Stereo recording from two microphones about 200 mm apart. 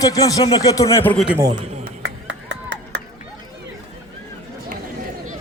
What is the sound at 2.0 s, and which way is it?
Music, 65° right (ahead or behind).